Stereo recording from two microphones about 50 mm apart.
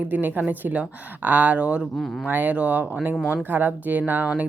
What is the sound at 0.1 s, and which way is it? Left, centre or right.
Speech, right.